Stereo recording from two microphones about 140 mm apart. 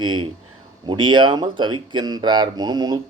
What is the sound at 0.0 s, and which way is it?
Speech, 35° right (ahead or behind).